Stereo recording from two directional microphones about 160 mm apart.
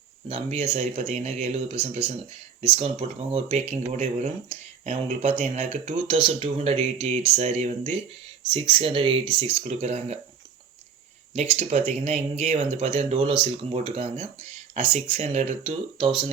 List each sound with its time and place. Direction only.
0.3 s speech: 40° right (ahead or behind)
8.4 s speech: 35° right (ahead or behind)
11.3 s speech: 45° right (ahead or behind)